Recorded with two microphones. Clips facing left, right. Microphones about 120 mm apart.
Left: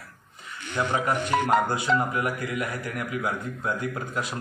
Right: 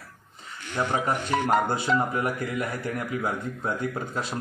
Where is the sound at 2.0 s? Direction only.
30° right (ahead or behind).